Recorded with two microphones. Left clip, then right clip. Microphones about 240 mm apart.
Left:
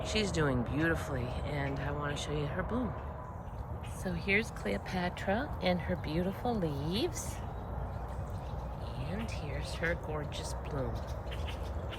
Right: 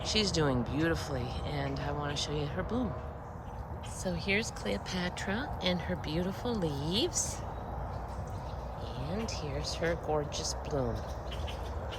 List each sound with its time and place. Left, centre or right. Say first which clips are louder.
0.0 s speech: right 2 dB; centre
4.0 s speech: even; centre
9.0 s speech: right 4 dB; centre